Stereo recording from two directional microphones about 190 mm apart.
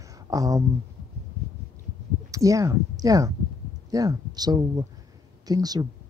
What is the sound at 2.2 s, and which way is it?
Speech, 15° right (ahead or behind).